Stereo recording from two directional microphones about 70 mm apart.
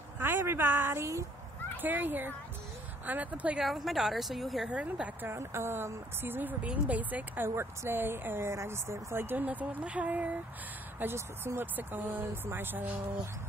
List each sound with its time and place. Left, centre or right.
0.2 s a woman's voice: right
3.5 s a woman's voice: centre
4.6 s a woman's voice: centre
5.3 s a woman's voice: right
7.4 s speech: right
11.0 s a woman's voice: right